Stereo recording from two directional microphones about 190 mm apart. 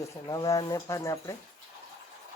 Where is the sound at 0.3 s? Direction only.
15° left (ahead or behind).